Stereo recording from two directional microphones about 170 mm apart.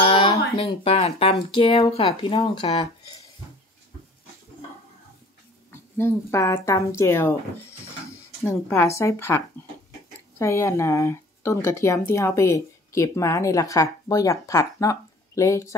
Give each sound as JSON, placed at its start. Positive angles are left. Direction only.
{"t": 0.0, "sound": "speech", "side_deg": 30}
{"t": 5.7, "sound": "speech", "side_deg": 15}
{"t": 10.4, "sound": "speech", "side_deg": 15}